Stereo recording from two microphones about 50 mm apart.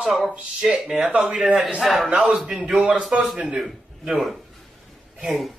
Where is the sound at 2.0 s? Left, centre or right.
Right.